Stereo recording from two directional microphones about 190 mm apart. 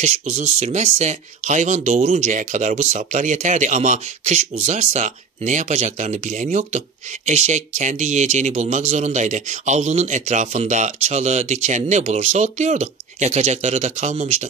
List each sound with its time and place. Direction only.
0.0 s speech: 40° right (ahead or behind)